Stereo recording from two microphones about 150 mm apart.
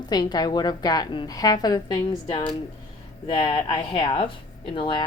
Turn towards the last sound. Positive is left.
turn(degrees=35)  # may be behind; listen again after turning